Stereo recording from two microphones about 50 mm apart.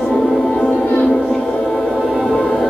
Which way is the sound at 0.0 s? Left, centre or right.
Centre.